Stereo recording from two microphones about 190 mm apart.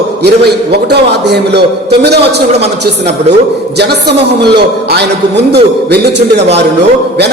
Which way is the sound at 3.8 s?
60° right (ahead or behind).